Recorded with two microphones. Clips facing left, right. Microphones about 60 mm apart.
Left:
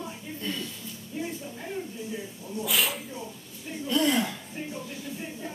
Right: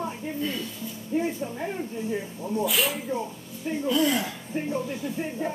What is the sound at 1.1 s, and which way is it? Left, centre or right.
Speech, right.